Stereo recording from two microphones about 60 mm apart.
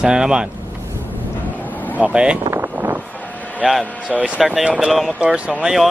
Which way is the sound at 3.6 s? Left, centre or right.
Centre.